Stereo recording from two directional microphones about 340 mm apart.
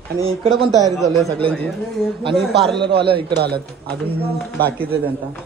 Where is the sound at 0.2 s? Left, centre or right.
Centre.